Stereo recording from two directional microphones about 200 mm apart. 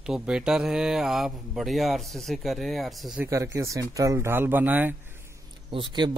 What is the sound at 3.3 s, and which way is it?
Speech, 15° right (ahead or behind).